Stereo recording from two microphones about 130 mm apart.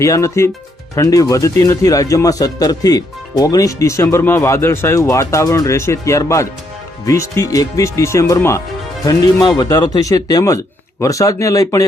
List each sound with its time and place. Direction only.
0.0 s speech: 25° left (ahead or behind)